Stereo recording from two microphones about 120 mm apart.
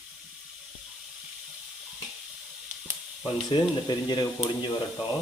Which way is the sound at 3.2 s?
40° left (ahead or behind).